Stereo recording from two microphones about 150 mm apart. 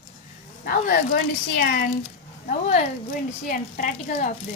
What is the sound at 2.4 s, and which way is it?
Speech, 55° left (ahead or behind).